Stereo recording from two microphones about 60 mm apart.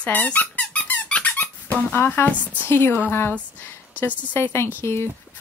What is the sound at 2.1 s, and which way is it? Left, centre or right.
Speech, left.